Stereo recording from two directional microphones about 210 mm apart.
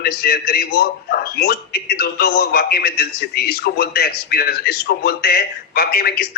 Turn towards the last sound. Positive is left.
turn(degrees=45)  # may be behind; listen again after turning